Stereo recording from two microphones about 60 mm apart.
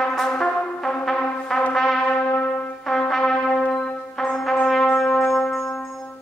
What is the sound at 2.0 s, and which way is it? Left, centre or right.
Brass instrument, left.